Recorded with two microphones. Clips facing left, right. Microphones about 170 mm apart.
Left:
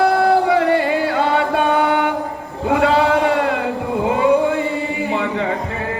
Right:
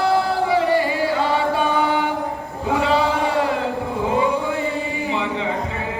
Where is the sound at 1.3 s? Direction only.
60° left (ahead or behind).